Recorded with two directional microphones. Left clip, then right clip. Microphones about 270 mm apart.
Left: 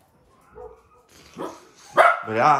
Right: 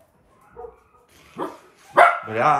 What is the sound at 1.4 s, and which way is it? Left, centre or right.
Dog, right.